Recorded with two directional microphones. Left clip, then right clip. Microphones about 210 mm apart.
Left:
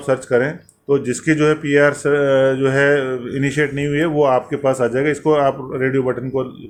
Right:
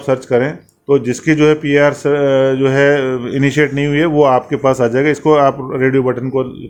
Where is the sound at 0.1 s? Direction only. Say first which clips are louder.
Right 3 dB; 25° right (ahead or behind).